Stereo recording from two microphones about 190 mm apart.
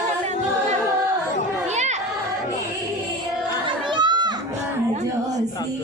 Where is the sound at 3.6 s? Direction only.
25° right (ahead or behind).